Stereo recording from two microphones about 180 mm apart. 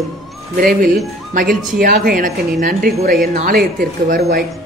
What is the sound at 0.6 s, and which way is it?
Speech, 50° right (ahead or behind).